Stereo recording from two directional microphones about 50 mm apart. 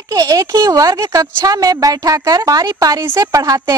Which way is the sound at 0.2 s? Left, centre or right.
Right.